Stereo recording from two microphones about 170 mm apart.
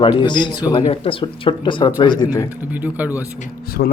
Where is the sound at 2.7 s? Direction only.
10° right (ahead or behind).